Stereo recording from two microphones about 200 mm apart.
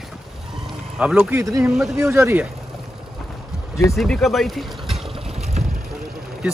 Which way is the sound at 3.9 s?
Centre (ahead or behind).